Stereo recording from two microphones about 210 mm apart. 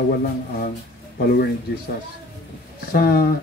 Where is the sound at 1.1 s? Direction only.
50° left (ahead or behind).